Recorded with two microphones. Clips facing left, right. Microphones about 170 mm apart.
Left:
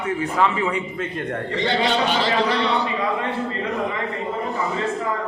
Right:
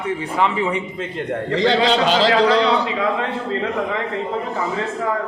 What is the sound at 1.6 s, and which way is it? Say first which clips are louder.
A man's voice: right 4 dB; 90° right.